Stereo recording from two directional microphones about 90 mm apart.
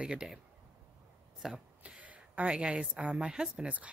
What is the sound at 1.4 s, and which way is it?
A woman's voice, 10° right (ahead or behind).